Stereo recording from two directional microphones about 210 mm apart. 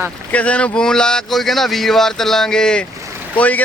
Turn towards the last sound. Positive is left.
turn(degrees=5)  # may be behind; listen again after turning